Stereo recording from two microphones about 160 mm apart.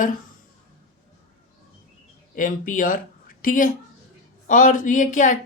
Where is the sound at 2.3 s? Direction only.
55° left (ahead or behind).